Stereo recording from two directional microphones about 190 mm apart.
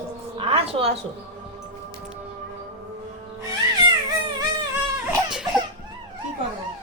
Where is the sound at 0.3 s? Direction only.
30° right (ahead or behind).